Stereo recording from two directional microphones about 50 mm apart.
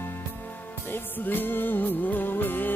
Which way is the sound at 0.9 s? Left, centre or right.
Left.